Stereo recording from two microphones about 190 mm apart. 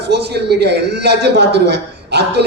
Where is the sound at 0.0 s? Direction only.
60° right (ahead or behind).